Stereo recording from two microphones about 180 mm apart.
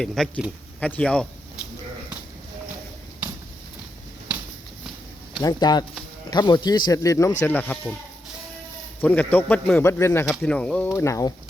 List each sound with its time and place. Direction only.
0.0 s speech: 5° left (ahead or behind)
5.4 s speech: 20° left (ahead or behind)
9.0 s a man's voice: 10° left (ahead or behind)
10.9 s a man's voice: 15° left (ahead or behind)